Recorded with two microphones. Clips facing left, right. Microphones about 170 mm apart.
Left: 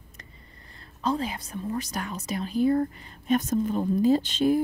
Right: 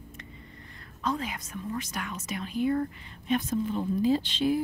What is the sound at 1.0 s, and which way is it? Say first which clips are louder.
A woman's voice: left 4 dB; 30° left (ahead or behind).